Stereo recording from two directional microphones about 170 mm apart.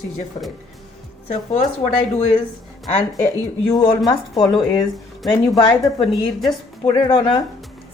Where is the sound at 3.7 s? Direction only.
25° left (ahead or behind).